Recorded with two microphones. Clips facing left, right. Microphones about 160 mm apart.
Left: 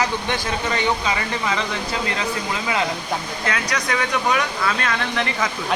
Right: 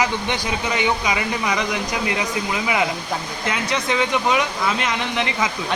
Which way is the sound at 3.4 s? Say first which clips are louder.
Right 3 dB; 25° right (ahead or behind).